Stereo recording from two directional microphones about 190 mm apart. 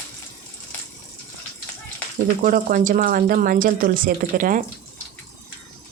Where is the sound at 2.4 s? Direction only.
45° right (ahead or behind).